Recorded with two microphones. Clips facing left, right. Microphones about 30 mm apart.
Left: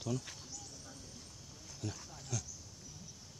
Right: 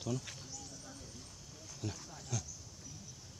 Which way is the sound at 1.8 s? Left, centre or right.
Centre.